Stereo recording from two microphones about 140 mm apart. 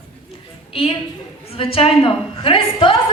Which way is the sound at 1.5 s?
40° left (ahead or behind).